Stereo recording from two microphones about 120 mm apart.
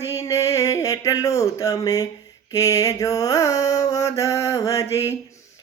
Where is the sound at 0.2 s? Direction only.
25° left (ahead or behind).